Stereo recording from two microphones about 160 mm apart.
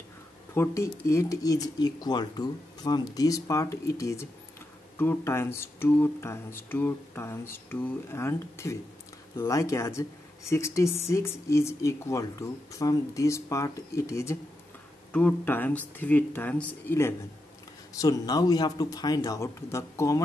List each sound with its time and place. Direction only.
0.6 s speech: 20° left (ahead or behind)